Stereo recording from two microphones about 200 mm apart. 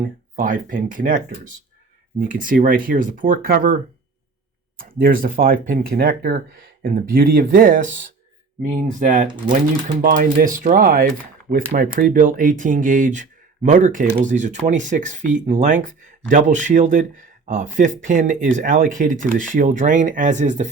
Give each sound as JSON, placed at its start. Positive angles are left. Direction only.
{"t": 0.3, "sound": "speech", "side_deg": -40}
{"t": 2.2, "sound": "speech", "side_deg": -45}
{"t": 4.8, "sound": "speech", "side_deg": -45}